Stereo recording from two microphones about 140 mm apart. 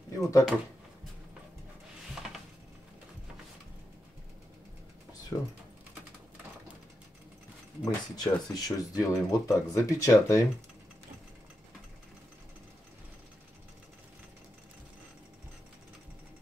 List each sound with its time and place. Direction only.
0.2 s a sound: 20° left (ahead or behind)
5.3 s speech: 20° left (ahead or behind)
7.8 s speech: 30° left (ahead or behind)